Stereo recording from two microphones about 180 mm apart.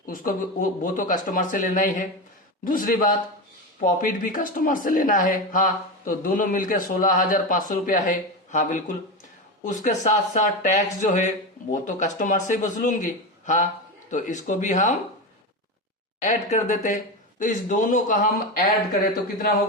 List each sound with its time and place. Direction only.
0.0 s speech: 50° left (ahead or behind)
16.2 s speech: 40° left (ahead or behind)